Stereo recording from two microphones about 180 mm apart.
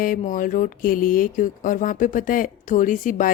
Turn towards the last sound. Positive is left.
turn(degrees=45)  # may be behind; listen again after turning